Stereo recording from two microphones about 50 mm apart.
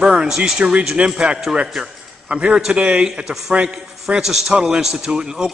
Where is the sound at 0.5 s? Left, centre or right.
Centre.